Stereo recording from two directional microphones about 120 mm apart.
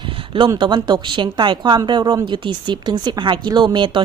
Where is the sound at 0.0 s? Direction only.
45° right (ahead or behind).